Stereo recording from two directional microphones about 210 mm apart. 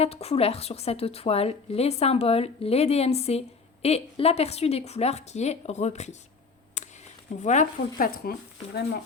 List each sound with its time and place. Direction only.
0.0 s a woman's voice: 30° left (ahead or behind)
6.8 s a sound: 35° left (ahead or behind)
7.3 s a woman's voice: 35° left (ahead or behind)
8.2 s speech: 50° left (ahead or behind)